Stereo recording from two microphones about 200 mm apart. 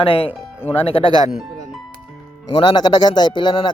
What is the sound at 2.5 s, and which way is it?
Speech, 25° left (ahead or behind).